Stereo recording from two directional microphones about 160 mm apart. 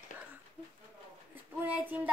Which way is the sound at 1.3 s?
10° right (ahead or behind).